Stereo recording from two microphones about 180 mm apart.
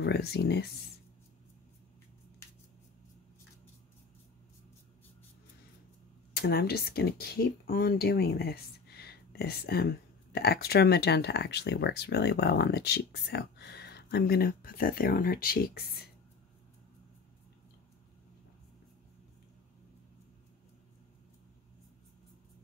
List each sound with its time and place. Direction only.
0.0 s speech: 65° left (ahead or behind)
6.3 s speech: 60° left (ahead or behind)